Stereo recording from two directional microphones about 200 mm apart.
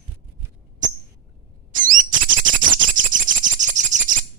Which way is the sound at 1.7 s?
40° right (ahead or behind).